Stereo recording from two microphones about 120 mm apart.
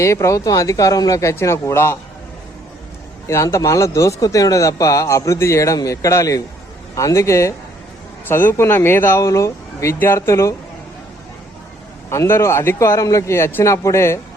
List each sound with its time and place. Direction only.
0.0 s speech: 25° left (ahead or behind)
3.2 s speech: 25° left (ahead or behind)
12.1 s speech: 20° left (ahead or behind)